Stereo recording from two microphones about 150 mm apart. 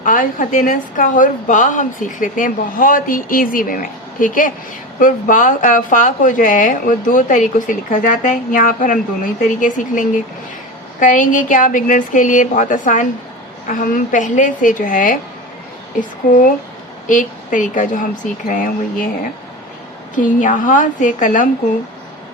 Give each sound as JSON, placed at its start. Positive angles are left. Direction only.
{"t": 0.0, "sound": "speech", "side_deg": 65}
{"t": 20.1, "sound": "speech", "side_deg": 60}